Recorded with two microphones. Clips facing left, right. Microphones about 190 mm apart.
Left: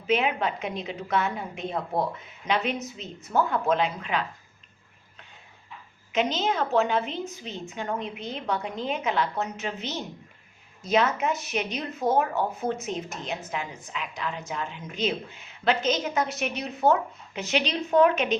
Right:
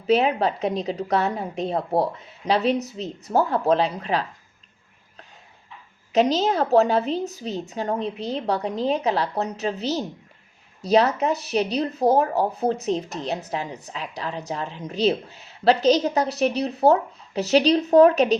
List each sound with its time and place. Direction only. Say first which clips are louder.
0.1 s a woman's voice: right 5 dB; 35° right (ahead or behind)
6.1 s a woman's voice: right 6 dB; 40° right (ahead or behind)